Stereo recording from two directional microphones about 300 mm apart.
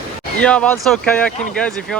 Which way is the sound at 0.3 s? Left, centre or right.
Centre.